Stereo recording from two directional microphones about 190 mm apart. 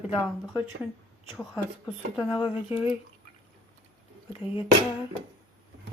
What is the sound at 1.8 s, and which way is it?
Speech, 25° left (ahead or behind).